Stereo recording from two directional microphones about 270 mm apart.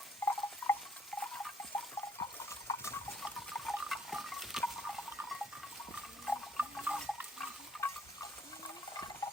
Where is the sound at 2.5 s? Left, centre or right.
Centre.